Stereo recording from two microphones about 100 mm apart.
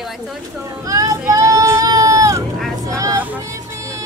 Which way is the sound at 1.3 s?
35° right (ahead or behind).